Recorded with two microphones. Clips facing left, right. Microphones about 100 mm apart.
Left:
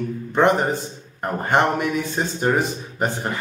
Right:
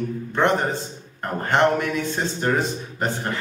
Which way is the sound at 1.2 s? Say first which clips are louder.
Even; 15° left (ahead or behind).